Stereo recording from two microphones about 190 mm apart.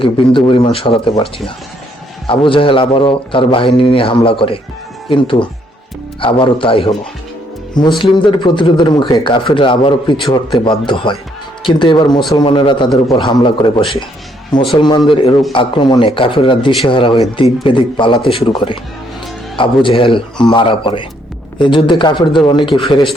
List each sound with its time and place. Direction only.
0.0 s a man's voice: 25° left (ahead or behind)